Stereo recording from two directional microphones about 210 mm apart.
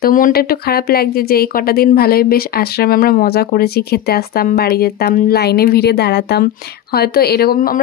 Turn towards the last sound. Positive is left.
turn(degrees=45)  # may be behind; listen again after turning